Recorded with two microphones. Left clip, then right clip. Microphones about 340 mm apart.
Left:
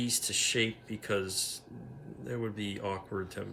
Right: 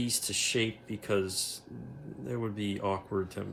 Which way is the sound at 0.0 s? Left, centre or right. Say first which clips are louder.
Left 1 dB; centre.